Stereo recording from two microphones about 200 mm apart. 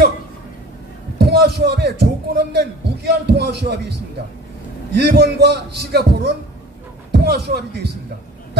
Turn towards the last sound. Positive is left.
turn(degrees=-55)  # may be behind; listen again after turning